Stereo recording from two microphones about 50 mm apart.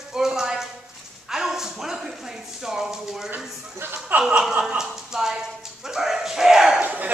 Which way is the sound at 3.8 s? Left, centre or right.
Right.